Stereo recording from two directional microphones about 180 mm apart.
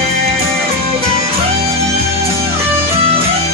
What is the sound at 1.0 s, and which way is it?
Music, 35° right (ahead or behind).